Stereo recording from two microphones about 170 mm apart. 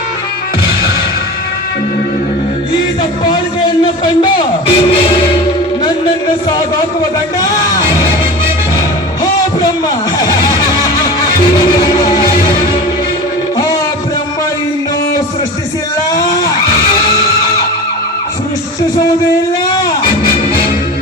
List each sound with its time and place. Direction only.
4.0 s music: 30° left (ahead or behind)